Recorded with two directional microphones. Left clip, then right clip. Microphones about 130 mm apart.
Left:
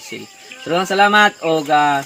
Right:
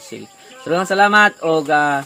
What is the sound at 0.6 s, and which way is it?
Speech, 20° right (ahead or behind).